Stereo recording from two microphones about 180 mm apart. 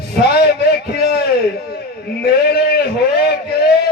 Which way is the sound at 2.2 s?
65° left (ahead or behind).